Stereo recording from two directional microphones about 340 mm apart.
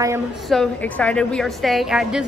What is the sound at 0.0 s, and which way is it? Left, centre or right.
A woman's voice, centre.